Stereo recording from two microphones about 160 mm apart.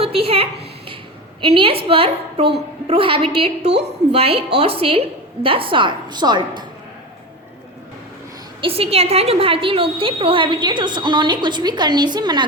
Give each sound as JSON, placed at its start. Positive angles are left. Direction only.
{"t": 0.0, "sound": "a woman's voice", "side_deg": -35}
{"t": 3.7, "sound": "a woman's voice", "side_deg": -90}
{"t": 4.1, "sound": "a woman's voice", "side_deg": -40}
{"t": 8.6, "sound": "a woman's voice", "side_deg": -35}